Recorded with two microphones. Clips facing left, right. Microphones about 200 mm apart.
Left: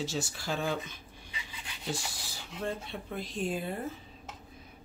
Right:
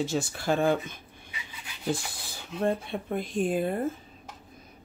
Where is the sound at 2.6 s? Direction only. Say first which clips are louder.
Right 8 dB; 55° right (ahead or behind).